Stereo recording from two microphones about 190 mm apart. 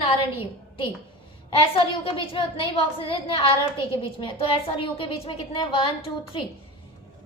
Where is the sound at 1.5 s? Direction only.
25° left (ahead or behind).